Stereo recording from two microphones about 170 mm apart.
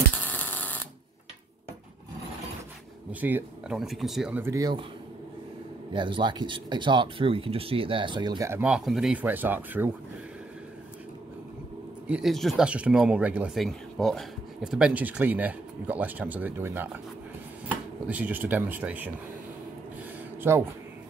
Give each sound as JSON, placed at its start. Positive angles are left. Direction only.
{"t": 0.1, "sound": "a sound", "side_deg": 10}
{"t": 3.1, "sound": "speech", "side_deg": -10}
{"t": 4.4, "sound": "speech", "side_deg": -20}
{"t": 5.9, "sound": "speech", "side_deg": -30}
{"t": 12.1, "sound": "speech", "side_deg": 0}
{"t": 20.4, "sound": "speech", "side_deg": -15}